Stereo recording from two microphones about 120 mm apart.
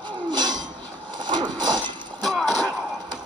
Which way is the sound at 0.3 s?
35° right (ahead or behind).